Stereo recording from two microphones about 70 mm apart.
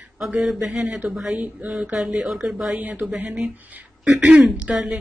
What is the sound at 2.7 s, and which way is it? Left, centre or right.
Speech, right.